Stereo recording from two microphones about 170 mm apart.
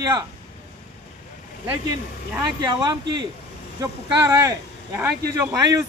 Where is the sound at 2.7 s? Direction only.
25° right (ahead or behind).